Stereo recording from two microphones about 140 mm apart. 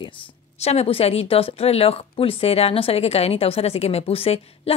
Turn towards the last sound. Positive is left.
turn(degrees=45)  # may be behind; listen again after turning